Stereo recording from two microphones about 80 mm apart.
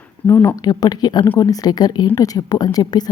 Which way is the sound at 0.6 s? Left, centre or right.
Left.